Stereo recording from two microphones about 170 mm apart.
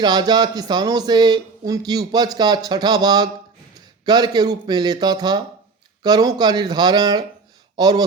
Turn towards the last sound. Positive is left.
turn(degrees=-25)  # may be behind; listen again after turning